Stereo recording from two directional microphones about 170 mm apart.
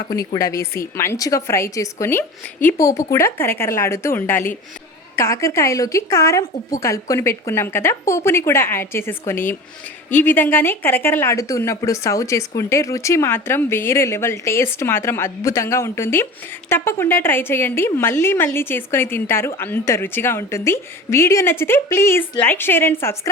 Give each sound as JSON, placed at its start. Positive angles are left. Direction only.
{"t": 0.3, "sound": "speech", "side_deg": 20}